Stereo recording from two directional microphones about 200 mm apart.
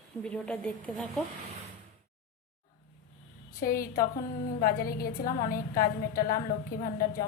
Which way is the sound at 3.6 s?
45° left (ahead or behind).